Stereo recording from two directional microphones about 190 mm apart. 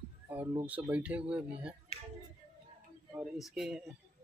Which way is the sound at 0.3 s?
10° right (ahead or behind).